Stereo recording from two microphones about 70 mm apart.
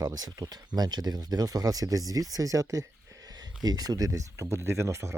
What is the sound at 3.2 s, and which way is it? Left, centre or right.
Speech, right.